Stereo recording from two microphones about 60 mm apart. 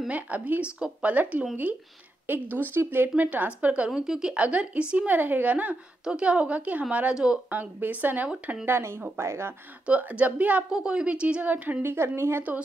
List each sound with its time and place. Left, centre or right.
0.1 s speech: right
2.5 s speech: right
3.3 s speech: right
4.0 s speech: centre; by 8.3 s right
8.6 s a woman's voice: right
9.8 s speech: right
10.7 s a woman's voice: centre
11.5 s speech: right
11.9 s a woman's voice: right